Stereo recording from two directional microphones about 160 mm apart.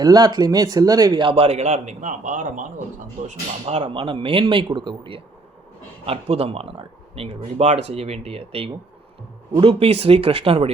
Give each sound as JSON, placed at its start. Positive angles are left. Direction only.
{"t": 0.0, "sound": "speech", "side_deg": -25}
{"t": 3.2, "sound": "speech", "side_deg": -40}